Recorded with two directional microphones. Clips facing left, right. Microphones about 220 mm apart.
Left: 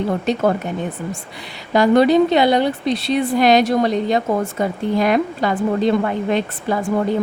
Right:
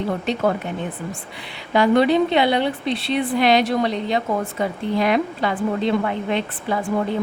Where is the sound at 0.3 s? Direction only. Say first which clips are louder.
Left 3 dB; 45° left (ahead or behind).